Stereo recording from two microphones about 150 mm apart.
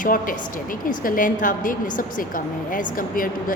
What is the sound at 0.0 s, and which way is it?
A woman's voice, 65° left (ahead or behind).